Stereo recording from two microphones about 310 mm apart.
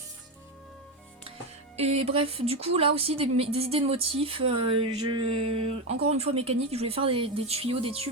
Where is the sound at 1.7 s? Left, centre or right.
Centre.